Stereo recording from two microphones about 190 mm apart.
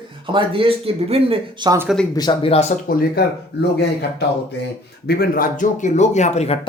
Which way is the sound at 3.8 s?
60° left (ahead or behind).